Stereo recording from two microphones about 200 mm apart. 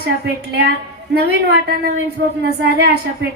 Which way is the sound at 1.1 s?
55° right (ahead or behind).